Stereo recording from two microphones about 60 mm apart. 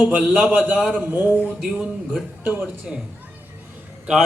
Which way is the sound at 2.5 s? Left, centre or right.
Right.